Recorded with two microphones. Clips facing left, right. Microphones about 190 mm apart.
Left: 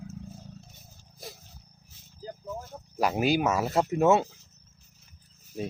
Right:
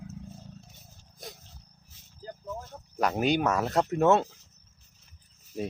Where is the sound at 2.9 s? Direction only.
5° left (ahead or behind).